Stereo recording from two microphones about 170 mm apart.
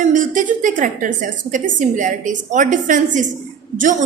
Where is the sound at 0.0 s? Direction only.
50° right (ahead or behind).